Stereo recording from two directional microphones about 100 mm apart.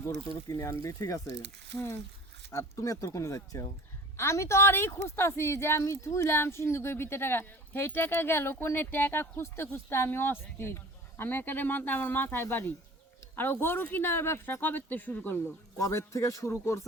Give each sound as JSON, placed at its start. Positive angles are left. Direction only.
{"t": 0.4, "sound": "speech", "side_deg": 30}
{"t": 2.5, "sound": "a woman's voice", "side_deg": 30}
{"t": 15.8, "sound": "speech", "side_deg": 30}